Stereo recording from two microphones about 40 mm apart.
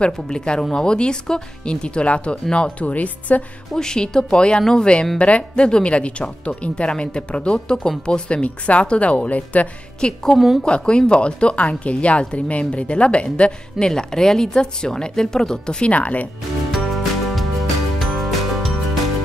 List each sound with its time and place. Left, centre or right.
0.0 s a woman's voice: left
3.7 s a woman's voice: centre; by 9.7 s left
9.9 s a woman's voice: left
13.8 s speech: centre
15.9 s speech: left
16.7 s music: centre